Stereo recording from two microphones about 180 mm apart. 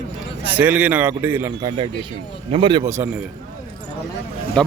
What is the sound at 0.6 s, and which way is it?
Speech, 10° right (ahead or behind).